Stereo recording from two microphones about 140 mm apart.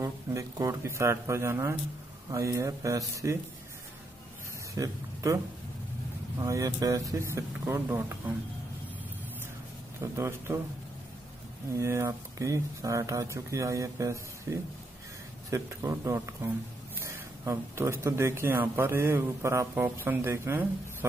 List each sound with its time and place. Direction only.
0.0 s speech: 25° right (ahead or behind)
4.7 s speech: 25° right (ahead or behind)
9.9 s speech: 20° right (ahead or behind)
11.8 s speech: 20° right (ahead or behind)